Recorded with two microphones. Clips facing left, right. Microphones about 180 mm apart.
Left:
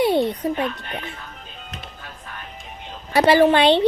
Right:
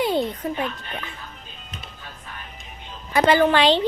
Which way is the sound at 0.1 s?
65° left (ahead or behind).